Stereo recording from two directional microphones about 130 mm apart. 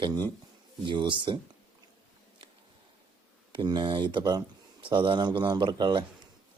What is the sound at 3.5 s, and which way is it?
Speech, 35° right (ahead or behind).